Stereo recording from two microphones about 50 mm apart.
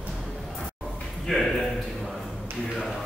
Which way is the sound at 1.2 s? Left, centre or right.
Centre.